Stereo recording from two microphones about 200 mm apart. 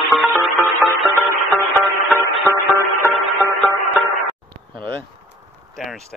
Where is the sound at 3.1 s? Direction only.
Centre (ahead or behind).